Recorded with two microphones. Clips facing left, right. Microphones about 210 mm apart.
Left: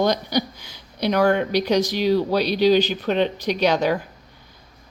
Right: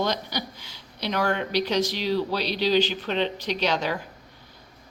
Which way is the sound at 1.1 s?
45° left (ahead or behind).